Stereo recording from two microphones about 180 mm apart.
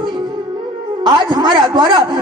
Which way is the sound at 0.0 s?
25° right (ahead or behind).